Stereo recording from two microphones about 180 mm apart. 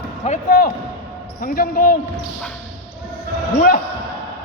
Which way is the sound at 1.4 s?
55° left (ahead or behind).